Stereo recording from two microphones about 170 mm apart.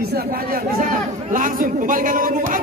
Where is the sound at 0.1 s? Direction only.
60° right (ahead or behind).